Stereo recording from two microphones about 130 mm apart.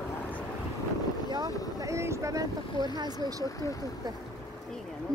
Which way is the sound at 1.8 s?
20° right (ahead or behind).